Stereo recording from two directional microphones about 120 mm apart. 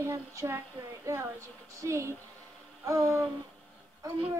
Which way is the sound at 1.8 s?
25° right (ahead or behind).